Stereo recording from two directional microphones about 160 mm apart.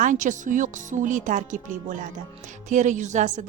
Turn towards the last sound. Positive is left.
turn(degrees=-50)  # may be behind; listen again after turning